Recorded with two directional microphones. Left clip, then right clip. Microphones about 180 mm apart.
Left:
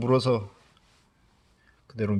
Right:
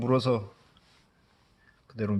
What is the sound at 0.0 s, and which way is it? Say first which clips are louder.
Speech: left 2 dB; 20° left (ahead or behind).